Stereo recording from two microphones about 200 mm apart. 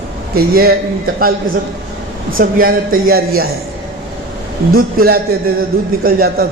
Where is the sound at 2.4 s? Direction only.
45° right (ahead or behind).